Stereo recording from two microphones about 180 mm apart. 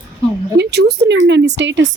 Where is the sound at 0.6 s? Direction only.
65° right (ahead or behind); by 1.8 s 85° right.